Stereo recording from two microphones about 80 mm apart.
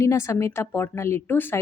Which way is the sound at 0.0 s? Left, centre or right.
Left.